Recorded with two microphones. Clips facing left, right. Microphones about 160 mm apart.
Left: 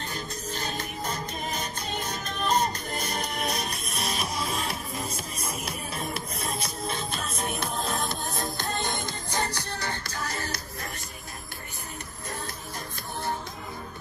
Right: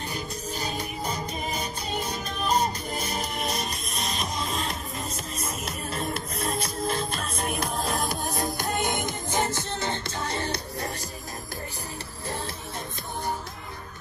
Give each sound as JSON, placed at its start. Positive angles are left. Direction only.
{"t": 0.1, "sound": "music", "side_deg": -10}
{"t": 8.4, "sound": "music", "side_deg": -15}